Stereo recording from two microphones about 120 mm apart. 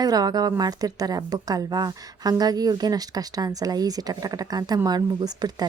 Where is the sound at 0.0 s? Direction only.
35° right (ahead or behind).